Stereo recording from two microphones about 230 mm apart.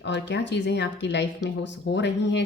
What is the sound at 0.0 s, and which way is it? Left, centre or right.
Speech, left.